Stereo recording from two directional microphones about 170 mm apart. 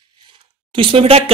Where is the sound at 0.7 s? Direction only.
30° right (ahead or behind).